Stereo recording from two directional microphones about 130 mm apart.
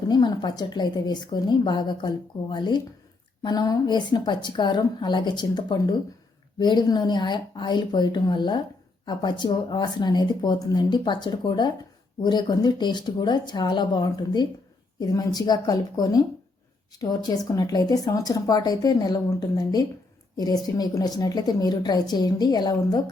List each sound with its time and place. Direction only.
0.1 s a woman's voice: 35° left (ahead or behind)